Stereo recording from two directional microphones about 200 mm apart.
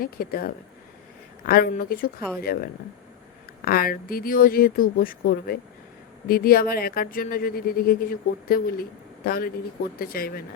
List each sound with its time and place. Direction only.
0.0 s speech: 50° left (ahead or behind)